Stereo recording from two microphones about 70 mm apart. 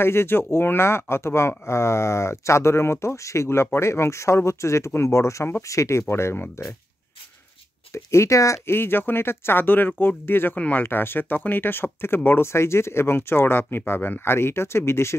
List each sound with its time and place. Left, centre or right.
0.0 s speech: left
7.9 s speech: left
8.7 s speech: left